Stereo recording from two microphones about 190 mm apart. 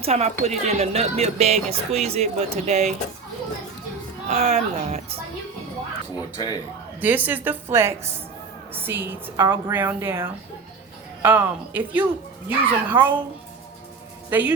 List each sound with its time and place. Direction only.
0.0 s speech: 35° right (ahead or behind)
4.3 s speech: 35° right (ahead or behind)
6.3 s speech: 20° left (ahead or behind)
7.0 s a woman's voice: 10° right (ahead or behind)
14.3 s speech: 10° right (ahead or behind)